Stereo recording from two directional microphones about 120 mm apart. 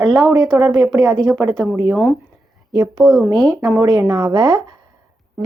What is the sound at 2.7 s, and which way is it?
Speech, 35° right (ahead or behind).